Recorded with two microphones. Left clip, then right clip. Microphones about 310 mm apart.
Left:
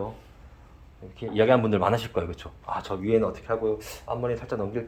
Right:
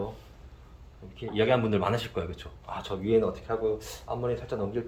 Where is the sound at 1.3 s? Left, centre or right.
Centre.